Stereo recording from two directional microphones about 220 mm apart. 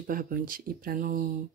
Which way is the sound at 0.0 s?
40° right (ahead or behind).